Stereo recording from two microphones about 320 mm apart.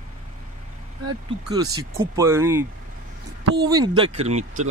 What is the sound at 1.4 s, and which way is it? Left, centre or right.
Speech, centre.